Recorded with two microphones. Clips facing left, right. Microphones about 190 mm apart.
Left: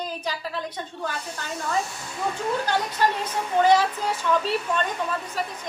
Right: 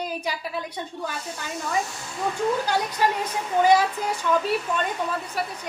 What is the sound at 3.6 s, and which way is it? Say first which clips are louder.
Speech: even; 10° right (ahead or behind).